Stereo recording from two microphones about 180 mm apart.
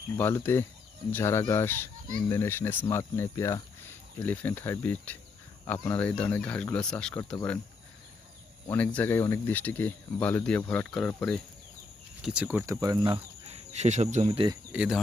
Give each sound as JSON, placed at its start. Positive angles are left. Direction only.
{"t": 0.2, "sound": "speech", "side_deg": 10}
{"t": 8.6, "sound": "speech", "side_deg": 10}
{"t": 13.5, "sound": "speech", "side_deg": -40}
{"t": 14.5, "sound": "cricket", "side_deg": -5}